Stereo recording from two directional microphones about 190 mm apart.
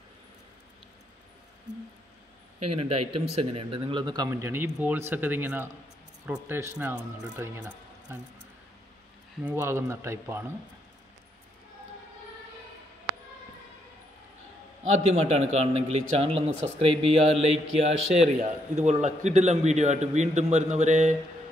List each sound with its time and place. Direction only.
2.6 s speech: 30° right (ahead or behind); by 8.2 s 10° right (ahead or behind)
9.4 s speech: 10° right (ahead or behind)
14.9 s a man's voice: 35° right (ahead or behind)